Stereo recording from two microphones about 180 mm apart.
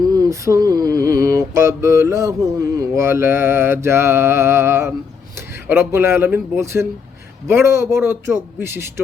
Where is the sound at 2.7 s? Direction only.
15° right (ahead or behind).